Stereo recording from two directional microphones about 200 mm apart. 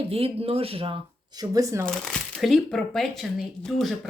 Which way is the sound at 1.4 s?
15° right (ahead or behind).